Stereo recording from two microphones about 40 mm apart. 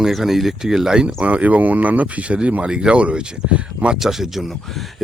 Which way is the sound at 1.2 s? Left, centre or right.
Right.